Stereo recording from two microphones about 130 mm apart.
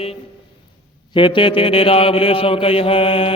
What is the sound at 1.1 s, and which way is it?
Mantra, 40° left (ahead or behind).